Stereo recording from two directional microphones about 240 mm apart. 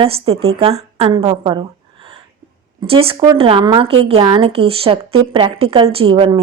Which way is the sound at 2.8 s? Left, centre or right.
Right.